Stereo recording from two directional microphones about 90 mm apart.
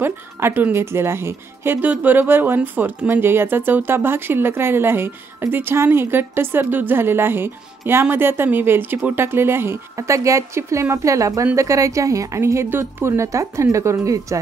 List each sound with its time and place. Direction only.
0.0 s a woman's voice: 25° right (ahead or behind)